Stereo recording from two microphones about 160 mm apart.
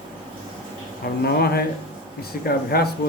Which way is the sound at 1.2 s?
75° left (ahead or behind).